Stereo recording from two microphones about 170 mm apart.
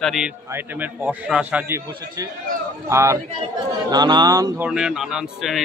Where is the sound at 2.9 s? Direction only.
15° right (ahead or behind).